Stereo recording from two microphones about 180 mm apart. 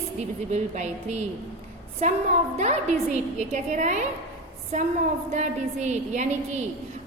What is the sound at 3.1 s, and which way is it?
Speech, 40° right (ahead or behind).